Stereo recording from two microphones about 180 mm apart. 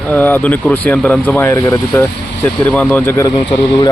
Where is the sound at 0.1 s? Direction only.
10° left (ahead or behind).